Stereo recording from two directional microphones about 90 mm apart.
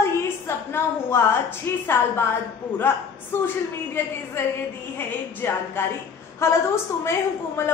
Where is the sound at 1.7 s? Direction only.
25° left (ahead or behind).